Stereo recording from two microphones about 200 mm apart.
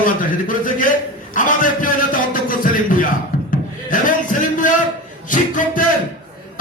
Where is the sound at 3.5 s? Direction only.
40° left (ahead or behind).